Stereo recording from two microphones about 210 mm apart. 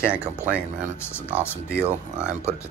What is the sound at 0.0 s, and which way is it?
Speech, 5° right (ahead or behind).